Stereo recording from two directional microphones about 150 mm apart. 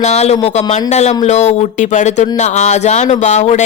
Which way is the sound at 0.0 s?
45° left (ahead or behind).